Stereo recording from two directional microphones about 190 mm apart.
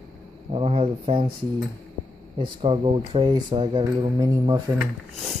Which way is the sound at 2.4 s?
30° right (ahead or behind).